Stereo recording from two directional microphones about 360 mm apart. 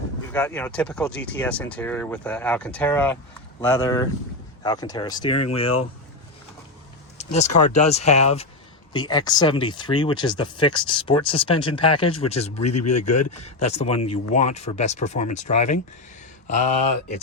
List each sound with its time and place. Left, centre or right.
0.3 s speech: centre
7.2 s speech: centre